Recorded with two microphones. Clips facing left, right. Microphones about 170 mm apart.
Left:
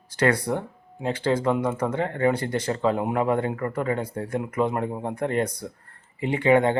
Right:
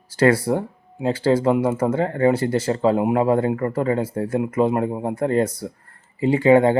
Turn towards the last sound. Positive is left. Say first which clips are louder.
# right 5 dB
turn(degrees=-35)  # may be behind; listen again after turning